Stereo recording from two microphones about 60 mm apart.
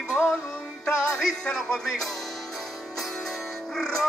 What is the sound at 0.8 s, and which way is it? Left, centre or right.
Music, centre.